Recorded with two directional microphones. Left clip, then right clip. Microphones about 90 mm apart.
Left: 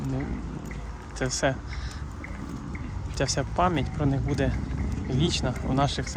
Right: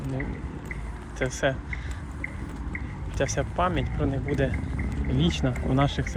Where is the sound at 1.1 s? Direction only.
55° left (ahead or behind).